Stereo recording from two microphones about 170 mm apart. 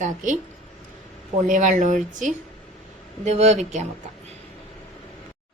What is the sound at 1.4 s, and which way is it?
Speech, 45° right (ahead or behind).